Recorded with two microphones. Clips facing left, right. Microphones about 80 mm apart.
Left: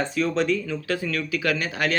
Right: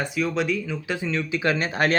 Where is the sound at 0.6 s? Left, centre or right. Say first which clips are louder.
Left 1 dB; centre; by 1.9 s right.